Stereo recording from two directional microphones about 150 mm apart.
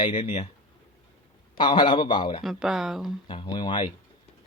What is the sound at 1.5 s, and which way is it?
Speech, 30° left (ahead or behind).